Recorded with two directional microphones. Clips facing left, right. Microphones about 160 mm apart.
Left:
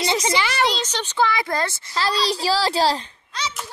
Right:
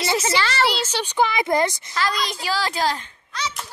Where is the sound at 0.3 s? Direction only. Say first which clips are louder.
Even; 15° left (ahead or behind).